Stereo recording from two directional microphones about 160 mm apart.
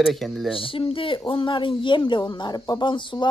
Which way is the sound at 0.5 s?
35° left (ahead or behind).